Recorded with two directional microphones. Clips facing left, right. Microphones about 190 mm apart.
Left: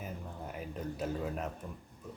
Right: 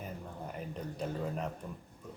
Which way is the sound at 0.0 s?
5° left (ahead or behind).